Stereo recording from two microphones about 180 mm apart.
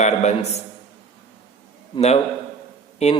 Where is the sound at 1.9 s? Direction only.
35° left (ahead or behind).